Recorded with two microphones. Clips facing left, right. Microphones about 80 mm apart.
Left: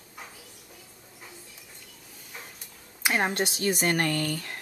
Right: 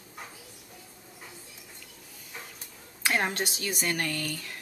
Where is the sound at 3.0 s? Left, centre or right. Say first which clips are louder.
Left 2 dB; centre.